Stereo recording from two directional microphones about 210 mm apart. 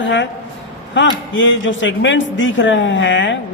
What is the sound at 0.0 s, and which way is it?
A man's voice, 60° left (ahead or behind).